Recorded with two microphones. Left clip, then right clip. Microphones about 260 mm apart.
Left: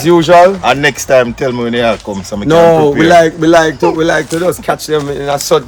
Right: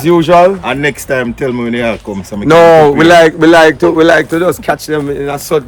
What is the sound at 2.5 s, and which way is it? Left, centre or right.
Speech, right.